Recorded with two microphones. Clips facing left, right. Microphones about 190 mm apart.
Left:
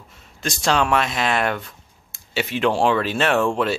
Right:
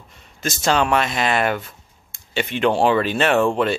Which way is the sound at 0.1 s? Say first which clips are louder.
Right 1 dB; centre (ahead or behind).